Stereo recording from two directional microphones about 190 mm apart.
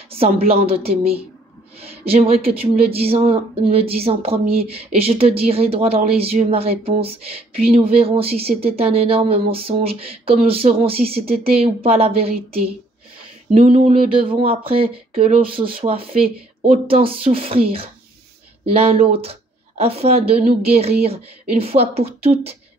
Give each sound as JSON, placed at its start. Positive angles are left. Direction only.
{"t": 0.1, "sound": "speech", "side_deg": -30}
{"t": 13.6, "sound": "speech", "side_deg": -40}
{"t": 14.2, "sound": "speech", "side_deg": -30}